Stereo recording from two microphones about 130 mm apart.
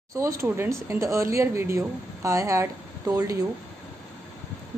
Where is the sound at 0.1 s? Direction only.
20° right (ahead or behind).